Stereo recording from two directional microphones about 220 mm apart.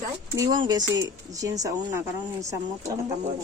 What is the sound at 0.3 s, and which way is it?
Speech, 20° right (ahead or behind).